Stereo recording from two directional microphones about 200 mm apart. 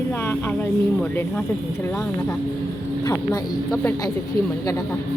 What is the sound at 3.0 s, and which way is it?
Speech, 15° left (ahead or behind).